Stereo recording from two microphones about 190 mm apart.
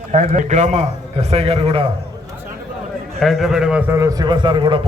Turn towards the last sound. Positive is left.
turn(degrees=-25)  # may be behind; listen again after turning